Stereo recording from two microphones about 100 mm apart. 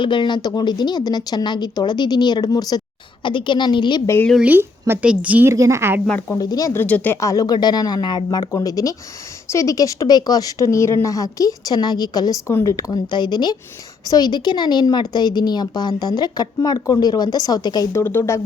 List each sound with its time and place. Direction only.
0.0 s a woman's voice: 55° left (ahead or behind)
3.2 s a woman's voice: 55° left (ahead or behind)
4.4 s a woman's voice: 20° right (ahead or behind)
5.5 s a woman's voice: 30° right (ahead or behind)
6.1 s speech: 20° left (ahead or behind)
6.3 s a woman's voice: 40° left (ahead or behind)
6.7 s speech: 15° left (ahead or behind)
7.2 s a woman's voice: 35° left (ahead or behind)
12.5 s a woman's voice: 30° left (ahead or behind)
13.1 s a woman's voice: 50° left (ahead or behind)
17.9 s speech: 25° left (ahead or behind)